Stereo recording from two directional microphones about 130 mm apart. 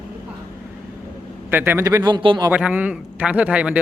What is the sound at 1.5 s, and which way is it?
Speech, 15° right (ahead or behind).